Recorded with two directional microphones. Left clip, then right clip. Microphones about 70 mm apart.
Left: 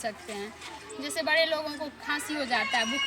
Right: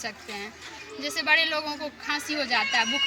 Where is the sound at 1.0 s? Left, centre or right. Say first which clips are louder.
Right 3 dB; left.